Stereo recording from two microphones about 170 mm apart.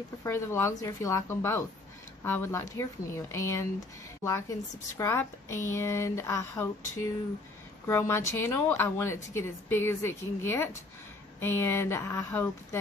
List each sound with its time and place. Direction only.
0.2 s a woman's voice: 15° left (ahead or behind)